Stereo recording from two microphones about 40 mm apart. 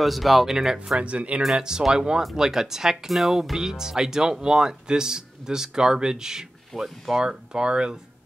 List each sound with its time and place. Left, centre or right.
0.0 s speech: centre
0.9 s speech: right
1.6 s speech: centre